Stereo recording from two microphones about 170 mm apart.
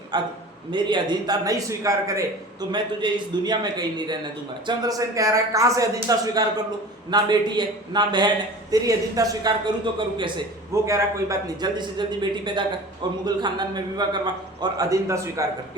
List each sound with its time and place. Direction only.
0.1 s a man's voice: 25° right (ahead or behind)
10.8 s a man's voice: 20° right (ahead or behind)